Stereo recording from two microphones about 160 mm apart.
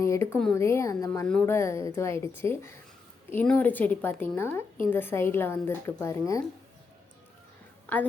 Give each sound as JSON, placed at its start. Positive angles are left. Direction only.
{"t": 0.0, "sound": "a sound", "side_deg": 15}
{"t": 0.5, "sound": "a woman's voice", "side_deg": 15}
{"t": 7.9, "sound": "a woman's voice", "side_deg": 10}